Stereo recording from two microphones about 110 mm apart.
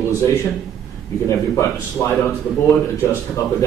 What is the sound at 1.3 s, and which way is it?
Speech, 25° left (ahead or behind).